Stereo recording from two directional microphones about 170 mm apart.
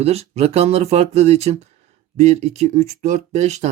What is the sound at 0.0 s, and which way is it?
Speech, 40° right (ahead or behind).